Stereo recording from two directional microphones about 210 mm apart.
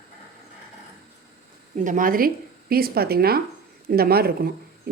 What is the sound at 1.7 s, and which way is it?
Speech, 40° right (ahead or behind).